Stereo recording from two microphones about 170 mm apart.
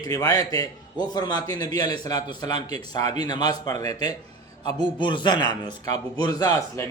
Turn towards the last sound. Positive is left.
turn(degrees=20)  # may be behind; listen again after turning